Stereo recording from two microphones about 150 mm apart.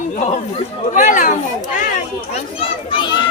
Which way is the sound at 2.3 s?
35° left (ahead or behind).